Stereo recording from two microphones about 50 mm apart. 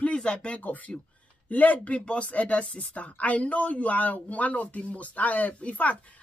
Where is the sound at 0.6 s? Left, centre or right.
Left.